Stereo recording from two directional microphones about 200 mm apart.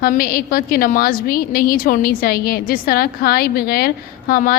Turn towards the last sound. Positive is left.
turn(degrees=50)  # may be behind; listen again after turning